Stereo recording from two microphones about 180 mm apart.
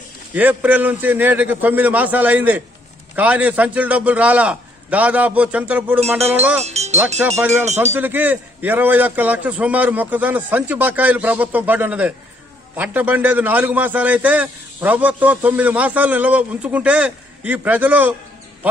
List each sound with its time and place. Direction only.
0.3 s a man's voice: 10° right (ahead or behind)
5.9 s wind chime: 35° right (ahead or behind)
6.6 s music: 35° right (ahead or behind)
7.2 s a man's voice: 5° right (ahead or behind)
7.6 s wind chime: 40° right (ahead or behind)
7.9 s a man's voice: 10° right (ahead or behind)